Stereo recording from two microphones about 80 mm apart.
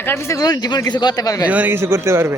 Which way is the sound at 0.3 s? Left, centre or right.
Left.